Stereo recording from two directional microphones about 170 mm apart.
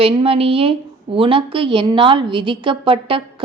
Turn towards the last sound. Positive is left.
turn(degrees=-30)  # may be behind; listen again after turning